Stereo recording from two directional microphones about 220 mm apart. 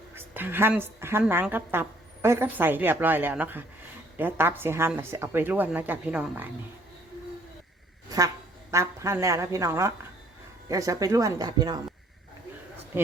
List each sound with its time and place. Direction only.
0.1 s a woman's voice: 10° right (ahead or behind)
8.7 s a woman's voice: 15° right (ahead or behind)